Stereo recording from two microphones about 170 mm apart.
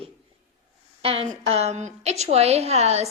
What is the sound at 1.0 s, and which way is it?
A woman's voice, 35° right (ahead or behind).